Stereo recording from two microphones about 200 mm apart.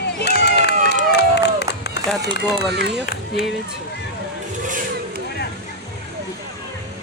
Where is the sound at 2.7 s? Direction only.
55° right (ahead or behind).